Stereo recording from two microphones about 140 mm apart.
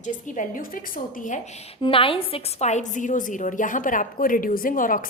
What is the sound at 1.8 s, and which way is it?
A woman's voice, 40° left (ahead or behind).